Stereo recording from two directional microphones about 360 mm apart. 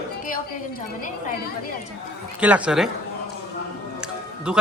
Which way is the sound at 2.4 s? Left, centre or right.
Centre.